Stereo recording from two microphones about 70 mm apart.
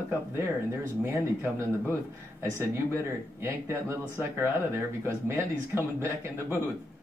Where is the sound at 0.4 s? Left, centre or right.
Right.